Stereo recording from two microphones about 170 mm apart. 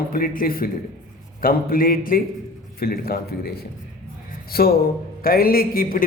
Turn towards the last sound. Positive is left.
turn(degrees=60)  # may be behind; listen again after turning